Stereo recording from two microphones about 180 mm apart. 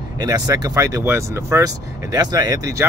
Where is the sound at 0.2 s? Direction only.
20° right (ahead or behind).